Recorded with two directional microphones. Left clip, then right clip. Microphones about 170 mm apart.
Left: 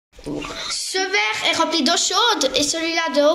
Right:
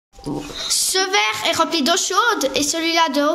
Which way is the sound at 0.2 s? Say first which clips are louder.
Right 1 dB; 90° right.